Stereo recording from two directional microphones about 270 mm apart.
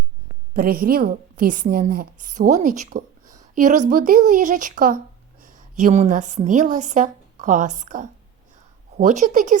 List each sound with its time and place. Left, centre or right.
0.5 s a woman's voice: right